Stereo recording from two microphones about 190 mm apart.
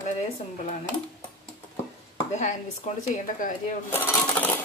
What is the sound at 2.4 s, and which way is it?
Speech, 40° left (ahead or behind).